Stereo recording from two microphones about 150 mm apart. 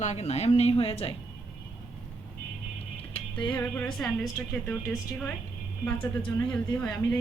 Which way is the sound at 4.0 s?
Centre (ahead or behind).